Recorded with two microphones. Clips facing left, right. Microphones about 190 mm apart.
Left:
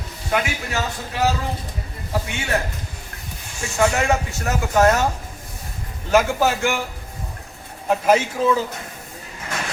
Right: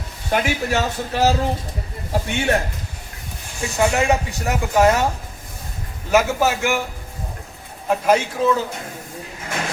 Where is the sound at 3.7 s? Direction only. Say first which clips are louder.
Right 1 dB; 15° right (ahead or behind).